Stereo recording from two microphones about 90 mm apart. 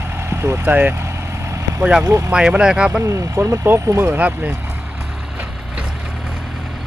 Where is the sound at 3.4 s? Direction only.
25° right (ahead or behind).